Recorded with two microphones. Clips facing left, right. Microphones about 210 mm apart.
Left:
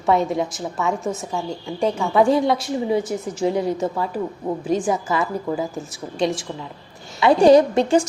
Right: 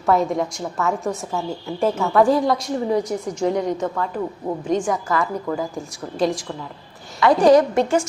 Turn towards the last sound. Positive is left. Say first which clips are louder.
# left 1 dB
turn(degrees=30)  # may be behind; listen again after turning